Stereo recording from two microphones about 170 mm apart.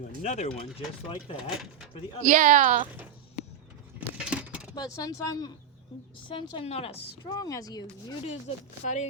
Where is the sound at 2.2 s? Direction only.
50° right (ahead or behind).